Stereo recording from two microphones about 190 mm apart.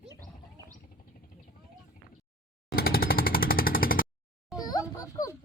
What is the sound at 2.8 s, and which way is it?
Jackhammer, 50° left (ahead or behind).